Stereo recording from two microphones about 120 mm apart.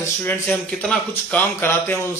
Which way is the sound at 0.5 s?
5° left (ahead or behind).